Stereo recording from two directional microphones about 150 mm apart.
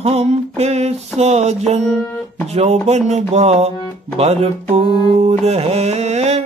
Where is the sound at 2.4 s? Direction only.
45° right (ahead or behind).